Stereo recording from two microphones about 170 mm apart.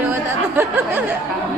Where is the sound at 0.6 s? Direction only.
10° right (ahead or behind).